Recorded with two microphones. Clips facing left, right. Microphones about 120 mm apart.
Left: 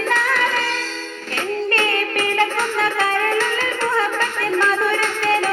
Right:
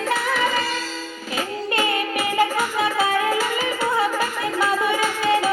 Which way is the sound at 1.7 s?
10° right (ahead or behind).